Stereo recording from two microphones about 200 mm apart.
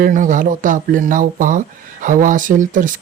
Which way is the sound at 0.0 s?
40° right (ahead or behind).